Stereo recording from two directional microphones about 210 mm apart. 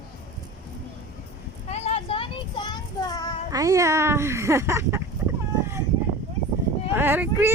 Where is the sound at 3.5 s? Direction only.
15° right (ahead or behind).